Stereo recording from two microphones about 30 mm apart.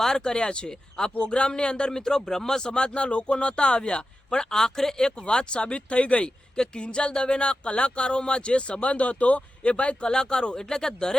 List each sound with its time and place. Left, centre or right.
0.0 s speech: left
1.9 s speech: centre
5.1 s speech: left
6.6 s speech: left
10.0 s speech: left